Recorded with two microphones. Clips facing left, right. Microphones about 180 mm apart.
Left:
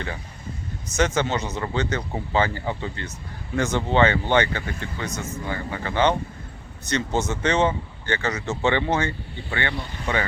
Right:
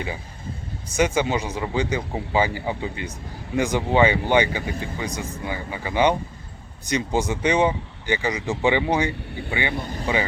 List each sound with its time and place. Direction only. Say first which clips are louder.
0.9 s speech: right 1 dB; 10° right (ahead or behind)
9.7 s speech: right 4 dB; 40° right (ahead or behind)